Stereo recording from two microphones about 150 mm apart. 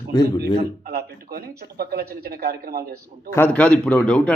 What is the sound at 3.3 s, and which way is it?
A man's voice, 10° left (ahead or behind).